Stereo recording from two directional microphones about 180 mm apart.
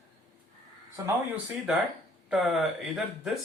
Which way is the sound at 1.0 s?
20° right (ahead or behind).